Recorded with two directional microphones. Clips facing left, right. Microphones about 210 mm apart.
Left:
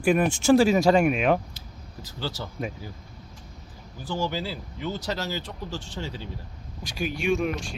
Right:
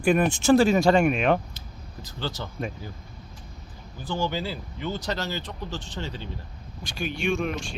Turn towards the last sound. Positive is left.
turn(degrees=0)  # may be behind; listen again after turning